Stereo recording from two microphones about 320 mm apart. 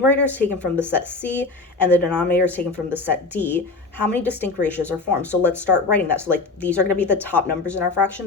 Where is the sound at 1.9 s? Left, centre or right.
Centre.